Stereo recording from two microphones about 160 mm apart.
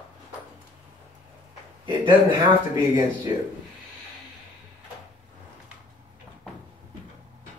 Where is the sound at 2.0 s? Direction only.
30° right (ahead or behind).